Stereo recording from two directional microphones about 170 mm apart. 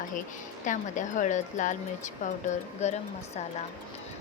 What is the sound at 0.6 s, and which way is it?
A woman's voice, 50° left (ahead or behind).